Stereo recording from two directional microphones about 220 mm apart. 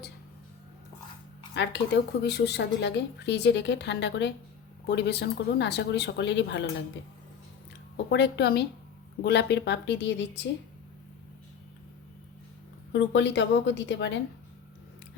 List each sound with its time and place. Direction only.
1.5 s speech: 50° left (ahead or behind)
8.1 s speech: 50° left (ahead or behind)
12.9 s speech: 50° left (ahead or behind)